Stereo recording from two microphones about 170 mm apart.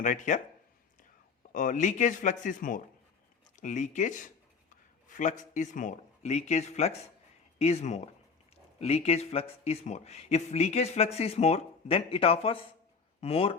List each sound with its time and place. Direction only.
0.0 s speech: 45° left (ahead or behind)
1.5 s speech: 50° left (ahead or behind)